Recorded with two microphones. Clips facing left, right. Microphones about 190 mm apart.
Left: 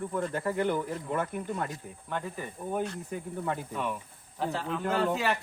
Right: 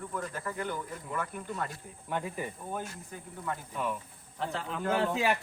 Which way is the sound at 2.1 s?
10° right (ahead or behind).